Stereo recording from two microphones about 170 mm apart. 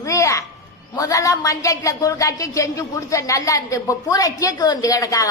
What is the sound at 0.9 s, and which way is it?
A woman's voice, 20° left (ahead or behind).